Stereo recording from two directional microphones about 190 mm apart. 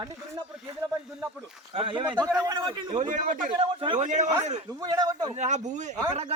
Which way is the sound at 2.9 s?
40° right (ahead or behind).